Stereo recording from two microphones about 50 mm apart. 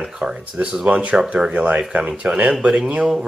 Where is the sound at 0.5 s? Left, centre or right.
Right.